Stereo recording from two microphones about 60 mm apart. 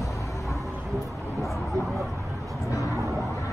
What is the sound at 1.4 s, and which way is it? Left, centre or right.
Vehicle, centre.